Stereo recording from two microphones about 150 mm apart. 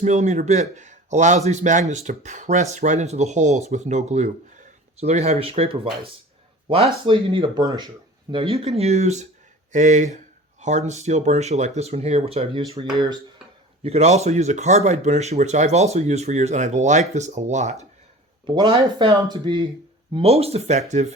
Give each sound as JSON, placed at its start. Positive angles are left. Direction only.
{"t": 0.0, "sound": "speech", "side_deg": -50}
{"t": 7.6, "sound": "speech", "side_deg": -25}
{"t": 8.3, "sound": "speech", "side_deg": -40}
{"t": 18.4, "sound": "speech", "side_deg": -30}